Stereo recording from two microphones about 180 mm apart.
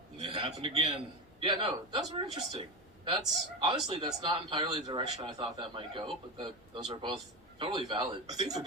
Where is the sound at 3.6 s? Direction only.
25° right (ahead or behind).